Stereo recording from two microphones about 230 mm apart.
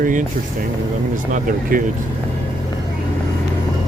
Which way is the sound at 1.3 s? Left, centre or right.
Right.